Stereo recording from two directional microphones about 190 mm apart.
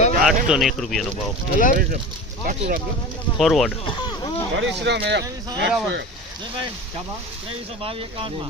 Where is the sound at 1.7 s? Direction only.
50° right (ahead or behind).